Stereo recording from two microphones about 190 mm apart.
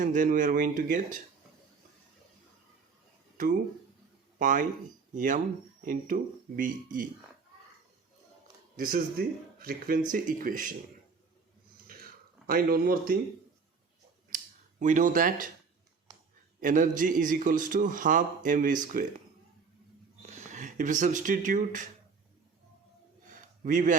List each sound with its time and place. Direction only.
0.0 s a man's voice: 45° right (ahead or behind)
4.4 s a man's voice: 45° right (ahead or behind)
8.7 s a man's voice: 50° right (ahead or behind)
12.5 s a man's voice: 50° right (ahead or behind)
14.3 s scissors: 45° right (ahead or behind)
16.6 s a man's voice: 45° right (ahead or behind)
20.2 s speech: 40° right (ahead or behind)
23.6 s a man's voice: 40° right (ahead or behind)